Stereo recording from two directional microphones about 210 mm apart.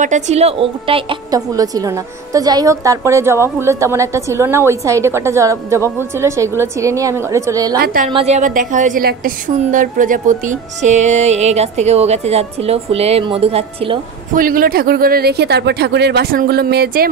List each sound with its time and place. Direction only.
0.0 s a woman's voice: 35° right (ahead or behind); by 7.8 s 15° right (ahead or behind)
7.8 s speech: 45° right (ahead or behind)
8.1 s a woman's voice: 30° right (ahead or behind)
14.3 s speech: 40° right (ahead or behind)